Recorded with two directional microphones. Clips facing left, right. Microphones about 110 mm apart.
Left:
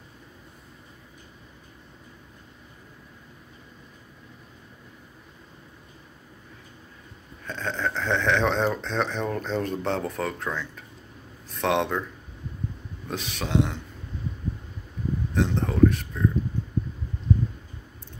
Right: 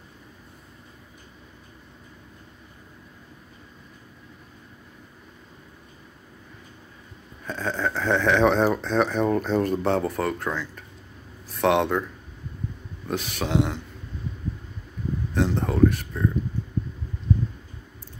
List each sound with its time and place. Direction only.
7.4 s speech: 5° right (ahead or behind)
13.1 s speech: centre (ahead or behind)
15.3 s a sound: 5° right (ahead or behind)